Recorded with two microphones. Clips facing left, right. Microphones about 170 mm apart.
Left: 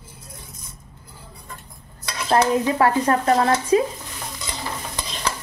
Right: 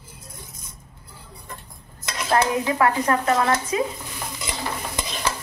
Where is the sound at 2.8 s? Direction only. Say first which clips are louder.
Even; 30° left (ahead or behind).